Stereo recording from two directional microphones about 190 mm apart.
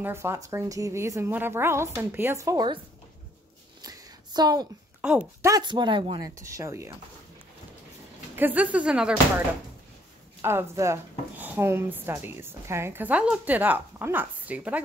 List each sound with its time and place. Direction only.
0.0 s speech: 15° right (ahead or behind)
3.8 s a sound: 20° right (ahead or behind)
5.0 s speech: 5° right (ahead or behind)
5.5 s speech: 25° right (ahead or behind)
8.4 s speech: 10° right (ahead or behind)
10.4 s speech: 15° right (ahead or behind)